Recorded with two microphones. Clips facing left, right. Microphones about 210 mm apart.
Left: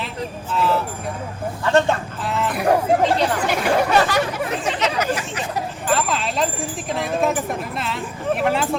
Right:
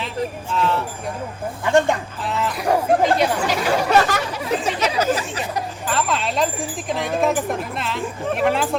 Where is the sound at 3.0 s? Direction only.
10° right (ahead or behind).